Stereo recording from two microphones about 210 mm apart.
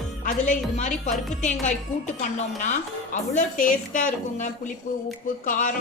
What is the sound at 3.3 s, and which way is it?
A woman's voice, 40° left (ahead or behind).